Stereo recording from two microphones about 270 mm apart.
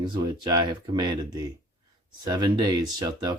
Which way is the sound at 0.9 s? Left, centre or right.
Centre.